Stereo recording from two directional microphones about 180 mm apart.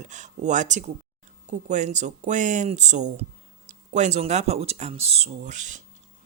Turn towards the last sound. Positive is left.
turn(degrees=-45)  # may be behind; listen again after turning